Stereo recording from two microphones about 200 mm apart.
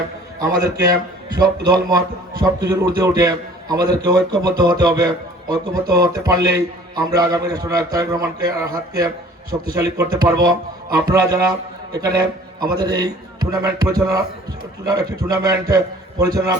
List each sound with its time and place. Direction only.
0.3 s a man's voice: 20° right (ahead or behind)